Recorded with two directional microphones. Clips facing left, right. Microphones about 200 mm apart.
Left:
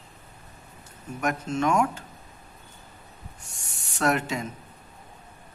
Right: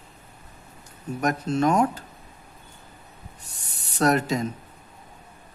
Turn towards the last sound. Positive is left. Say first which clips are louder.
# right 4 dB
turn(degrees=-40)  # may be behind; listen again after turning